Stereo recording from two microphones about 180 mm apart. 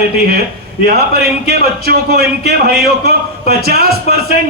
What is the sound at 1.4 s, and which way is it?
A man's voice, 60° right (ahead or behind).